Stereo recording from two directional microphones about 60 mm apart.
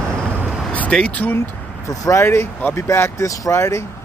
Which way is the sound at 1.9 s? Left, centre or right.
Left.